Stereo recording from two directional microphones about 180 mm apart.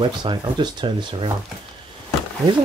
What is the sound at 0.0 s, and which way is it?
Speech, 25° right (ahead or behind).